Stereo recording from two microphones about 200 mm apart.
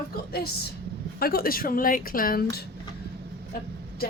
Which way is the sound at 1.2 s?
50° left (ahead or behind).